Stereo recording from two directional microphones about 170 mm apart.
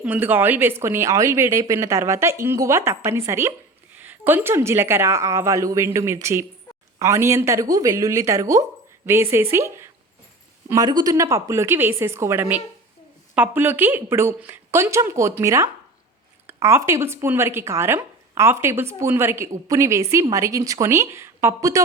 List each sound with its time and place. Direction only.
0.0 s speech: 10° right (ahead or behind)